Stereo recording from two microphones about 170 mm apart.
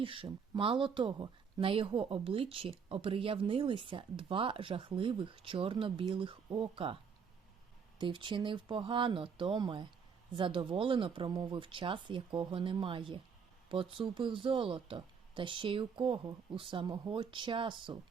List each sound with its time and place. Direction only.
0.0 s speech: 30° right (ahead or behind)